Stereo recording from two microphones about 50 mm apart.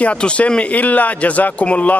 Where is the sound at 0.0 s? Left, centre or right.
Left.